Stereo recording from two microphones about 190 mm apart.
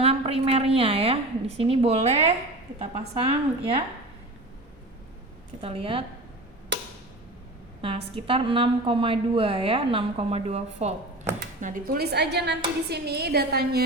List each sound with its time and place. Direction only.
0.0 s a woman's voice: 30° right (ahead or behind)
3.2 s a woman's voice: 30° right (ahead or behind)
5.6 s a woman's voice: 30° right (ahead or behind)
7.8 s a woman's voice: 30° right (ahead or behind)
11.6 s a woman's voice: 50° right (ahead or behind)